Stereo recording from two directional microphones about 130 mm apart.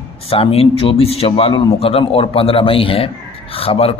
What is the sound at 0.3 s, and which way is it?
A man's voice, 50° left (ahead or behind).